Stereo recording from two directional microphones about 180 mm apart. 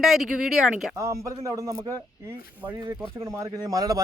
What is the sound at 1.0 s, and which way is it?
Speech, 15° right (ahead or behind).